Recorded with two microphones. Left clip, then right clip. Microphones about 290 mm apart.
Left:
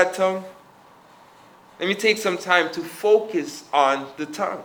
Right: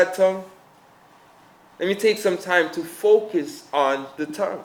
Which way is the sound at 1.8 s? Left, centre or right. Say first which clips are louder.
Right 1 dB; right.